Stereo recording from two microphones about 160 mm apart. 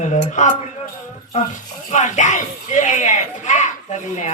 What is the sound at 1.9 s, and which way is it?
Speech, 50° left (ahead or behind).